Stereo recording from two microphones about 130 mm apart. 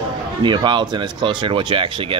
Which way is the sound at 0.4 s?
35° right (ahead or behind).